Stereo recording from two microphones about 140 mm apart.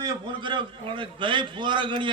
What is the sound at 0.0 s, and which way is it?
A man's voice, 30° right (ahead or behind).